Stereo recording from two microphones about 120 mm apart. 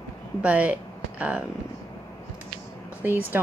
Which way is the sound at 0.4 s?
10° right (ahead or behind).